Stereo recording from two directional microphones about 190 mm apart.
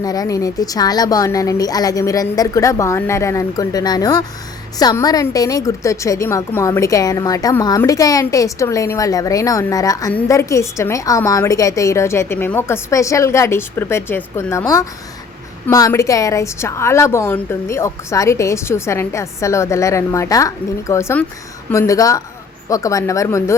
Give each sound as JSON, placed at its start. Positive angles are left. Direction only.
{"t": 0.0, "sound": "a woman's voice", "side_deg": 20}